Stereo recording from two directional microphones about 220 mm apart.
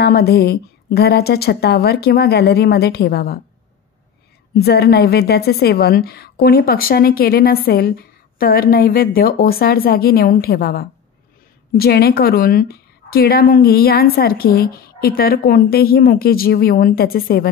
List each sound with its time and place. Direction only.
0.0 s a woman's voice: 45° left (ahead or behind)
4.6 s a woman's voice: 45° left (ahead or behind)